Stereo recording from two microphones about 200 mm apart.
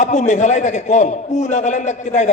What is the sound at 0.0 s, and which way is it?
A man's voice, 35° left (ahead or behind).